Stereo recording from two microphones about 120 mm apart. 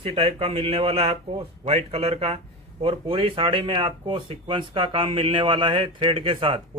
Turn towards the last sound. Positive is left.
turn(degrees=-45)  # may be behind; listen again after turning